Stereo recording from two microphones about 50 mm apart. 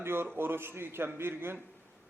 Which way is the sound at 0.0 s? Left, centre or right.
Right.